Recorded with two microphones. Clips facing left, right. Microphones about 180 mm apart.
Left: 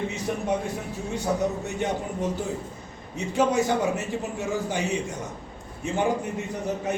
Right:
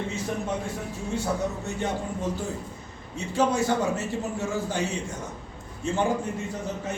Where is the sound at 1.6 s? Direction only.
15° left (ahead or behind).